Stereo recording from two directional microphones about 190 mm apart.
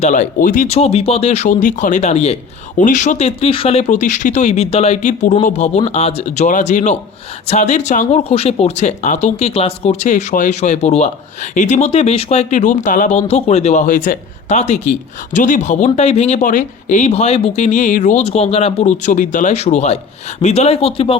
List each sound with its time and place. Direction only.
0.0 s speech: 40° left (ahead or behind)